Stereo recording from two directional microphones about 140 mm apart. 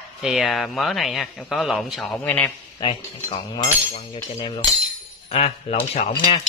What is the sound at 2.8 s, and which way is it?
Cutlery, 35° left (ahead or behind).